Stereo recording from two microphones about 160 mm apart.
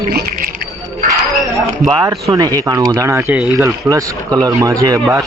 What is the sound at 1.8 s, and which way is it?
Speech, 25° right (ahead or behind).